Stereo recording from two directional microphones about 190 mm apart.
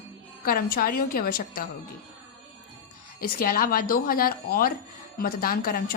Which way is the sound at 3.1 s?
50° left (ahead or behind).